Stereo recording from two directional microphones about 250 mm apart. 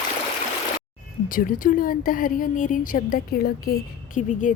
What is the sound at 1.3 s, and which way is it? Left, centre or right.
A woman's voice, left.